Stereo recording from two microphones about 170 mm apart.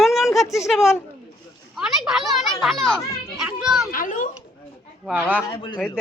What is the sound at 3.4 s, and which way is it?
Children playing, 5° right (ahead or behind).